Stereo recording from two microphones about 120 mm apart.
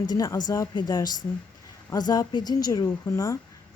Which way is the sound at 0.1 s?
30° left (ahead or behind).